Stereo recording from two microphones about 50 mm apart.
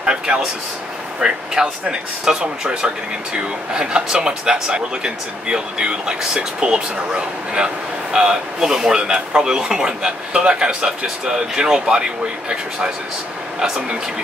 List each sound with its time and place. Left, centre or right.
0.0 s speech: centre